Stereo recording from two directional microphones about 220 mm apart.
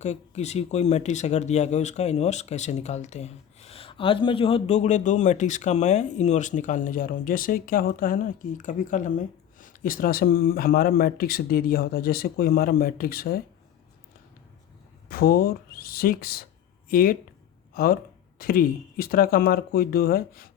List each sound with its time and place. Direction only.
0.0 s speech: 30° left (ahead or behind)
15.1 s speech: 45° left (ahead or behind)